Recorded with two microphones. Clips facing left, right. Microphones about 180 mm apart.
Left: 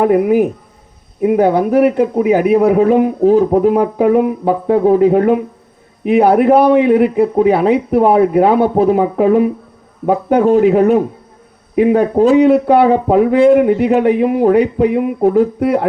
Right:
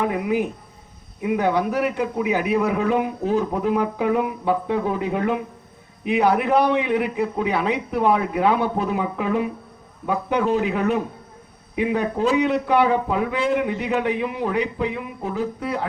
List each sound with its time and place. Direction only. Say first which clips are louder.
0.0 s a man's voice: left 11 dB; 50° left (ahead or behind)
12.8 s a man's voice: left 10 dB; 45° left (ahead or behind); by 15.9 s 60° left (ahead or behind)